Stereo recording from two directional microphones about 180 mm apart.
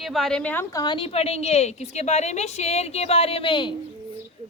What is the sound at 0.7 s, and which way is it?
A woman's voice, 25° left (ahead or behind).